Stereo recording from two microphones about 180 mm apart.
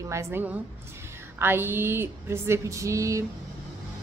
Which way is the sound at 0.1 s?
15° right (ahead or behind).